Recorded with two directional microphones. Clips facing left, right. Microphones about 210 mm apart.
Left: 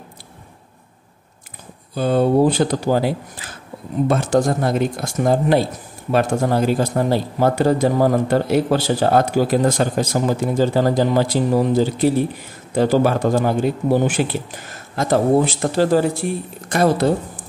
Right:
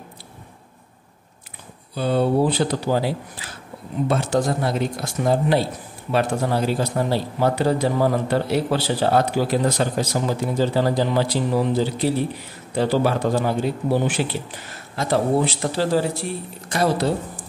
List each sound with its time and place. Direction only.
2.0 s a man's voice: 45° left (ahead or behind)